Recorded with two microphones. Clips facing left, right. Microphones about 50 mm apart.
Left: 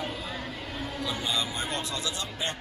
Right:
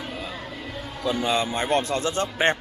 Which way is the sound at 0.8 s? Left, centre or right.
Right.